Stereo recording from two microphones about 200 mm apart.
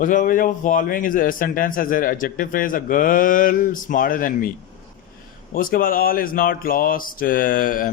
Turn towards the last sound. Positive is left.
turn(degrees=45)  # may be behind; listen again after turning